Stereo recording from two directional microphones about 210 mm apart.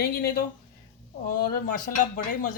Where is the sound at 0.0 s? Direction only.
45° left (ahead or behind).